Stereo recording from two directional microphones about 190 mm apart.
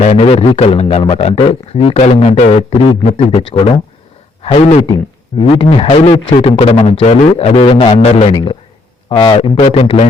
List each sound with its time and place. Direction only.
0.0 s a man's voice: 35° left (ahead or behind)